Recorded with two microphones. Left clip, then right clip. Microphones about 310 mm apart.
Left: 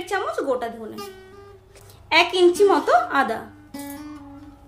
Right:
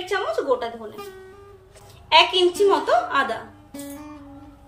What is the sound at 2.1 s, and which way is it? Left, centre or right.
A woman's voice, centre.